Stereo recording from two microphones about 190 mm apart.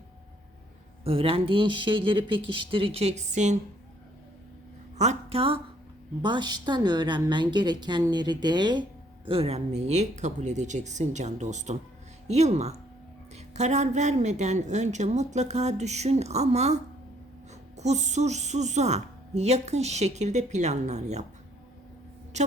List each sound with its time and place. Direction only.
1.0 s a woman's voice: 30° right (ahead or behind)
4.9 s a woman's voice: 35° right (ahead or behind)